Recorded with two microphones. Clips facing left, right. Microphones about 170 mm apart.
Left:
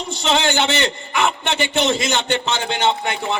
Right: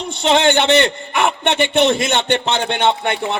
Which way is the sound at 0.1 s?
60° right (ahead or behind).